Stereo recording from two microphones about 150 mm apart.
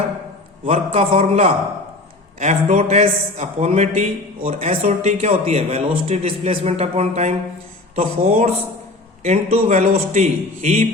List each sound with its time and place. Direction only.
0.6 s speech: 40° right (ahead or behind)